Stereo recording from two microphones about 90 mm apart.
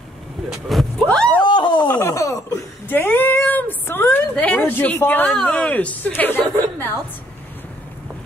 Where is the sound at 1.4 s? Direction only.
60° left (ahead or behind).